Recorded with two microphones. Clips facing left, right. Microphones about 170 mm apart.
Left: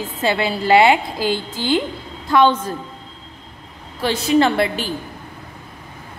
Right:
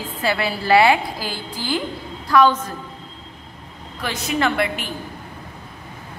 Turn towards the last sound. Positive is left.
turn(degrees=30)  # may be behind; listen again after turning